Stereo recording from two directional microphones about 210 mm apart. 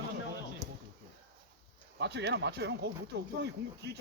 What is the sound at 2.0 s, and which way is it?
Speech, 55° right (ahead or behind).